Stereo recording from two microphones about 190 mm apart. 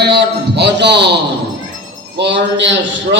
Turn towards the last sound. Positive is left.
turn(degrees=-70)  # may be behind; listen again after turning